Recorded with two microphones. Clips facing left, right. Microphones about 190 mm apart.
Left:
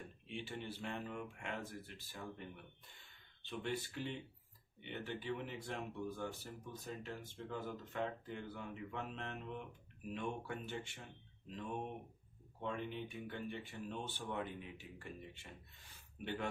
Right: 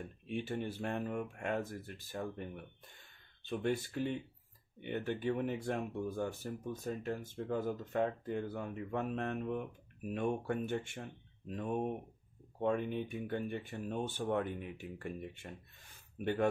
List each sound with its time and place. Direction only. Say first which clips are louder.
0.0 s speech: right 8 dB; 50° right (ahead or behind)